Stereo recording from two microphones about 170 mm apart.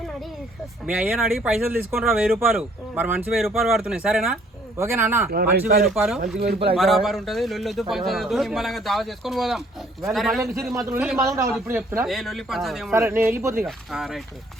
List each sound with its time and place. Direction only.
0.9 s speech: 5° right (ahead or behind)
4.8 s speech: 15° right (ahead or behind)
5.3 s speech: 60° right (ahead or behind)
5.9 s speech: centre (ahead or behind)
10.8 s speech: 15° right (ahead or behind)
12.0 s speech: centre (ahead or behind)
12.9 s speech: 15° right (ahead or behind)
13.7 s speech: centre (ahead or behind)